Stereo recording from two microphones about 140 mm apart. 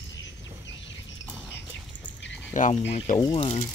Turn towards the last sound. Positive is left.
turn(degrees=40)  # may be behind; listen again after turning